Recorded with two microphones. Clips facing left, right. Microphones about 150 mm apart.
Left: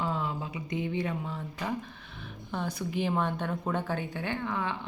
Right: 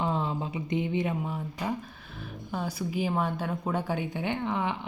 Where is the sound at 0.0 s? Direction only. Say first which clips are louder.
Right 3 dB; 25° right (ahead or behind).